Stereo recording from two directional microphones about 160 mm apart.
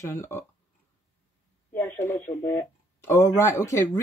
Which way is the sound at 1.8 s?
10° left (ahead or behind).